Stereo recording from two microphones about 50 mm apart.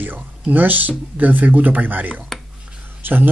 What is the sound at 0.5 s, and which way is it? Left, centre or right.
Speech, right.